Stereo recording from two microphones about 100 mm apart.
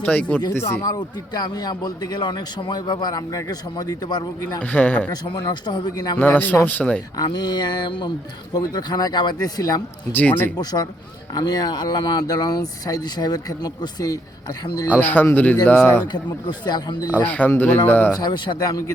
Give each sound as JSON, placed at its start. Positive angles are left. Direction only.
{"t": 0.0, "sound": "speech", "side_deg": 15}
{"t": 0.5, "sound": "a man's voice", "side_deg": 25}
{"t": 0.9, "sound": "a man's voice", "side_deg": 45}
{"t": 4.6, "sound": "a man's voice", "side_deg": 15}
{"t": 5.1, "sound": "a man's voice", "side_deg": 45}
{"t": 6.1, "sound": "a man's voice", "side_deg": 15}
{"t": 7.3, "sound": "a man's voice", "side_deg": 45}
{"t": 10.1, "sound": "a man's voice", "side_deg": 20}
{"t": 10.6, "sound": "speech", "side_deg": 40}
{"t": 14.9, "sound": "a man's voice", "side_deg": 20}
{"t": 15.6, "sound": "speech", "side_deg": 10}
{"t": 16.1, "sound": "a man's voice", "side_deg": 50}
{"t": 17.2, "sound": "a man's voice", "side_deg": 20}
{"t": 18.2, "sound": "speech", "side_deg": 50}